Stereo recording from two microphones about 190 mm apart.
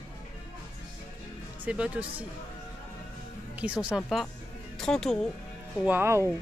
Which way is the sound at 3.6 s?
5° right (ahead or behind).